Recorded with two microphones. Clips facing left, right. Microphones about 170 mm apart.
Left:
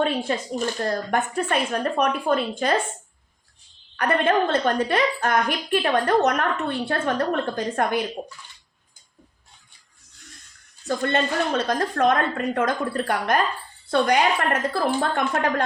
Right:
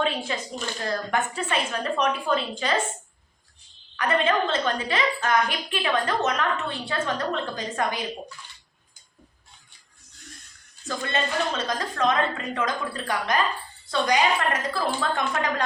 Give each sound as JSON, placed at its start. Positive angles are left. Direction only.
{"t": 0.0, "sound": "speech", "side_deg": 50}
{"t": 3.9, "sound": "a woman's voice", "side_deg": 55}
{"t": 10.8, "sound": "a woman's voice", "side_deg": 55}